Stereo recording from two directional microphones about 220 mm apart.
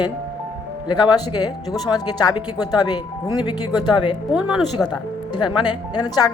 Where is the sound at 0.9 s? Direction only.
20° left (ahead or behind).